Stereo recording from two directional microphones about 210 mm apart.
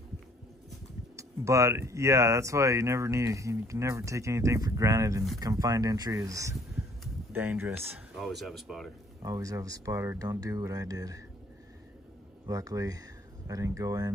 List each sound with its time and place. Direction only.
1.1 s speech: 15° right (ahead or behind)
9.2 s speech: 15° right (ahead or behind)
12.4 s speech: 15° right (ahead or behind)